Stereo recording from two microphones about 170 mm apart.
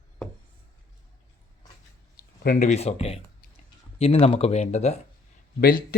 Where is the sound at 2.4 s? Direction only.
60° left (ahead or behind).